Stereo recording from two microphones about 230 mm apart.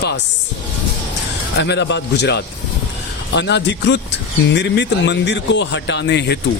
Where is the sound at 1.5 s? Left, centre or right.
Left.